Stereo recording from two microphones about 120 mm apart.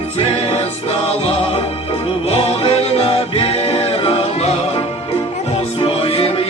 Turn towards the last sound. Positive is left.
turn(degrees=50)  # may be behind; listen again after turning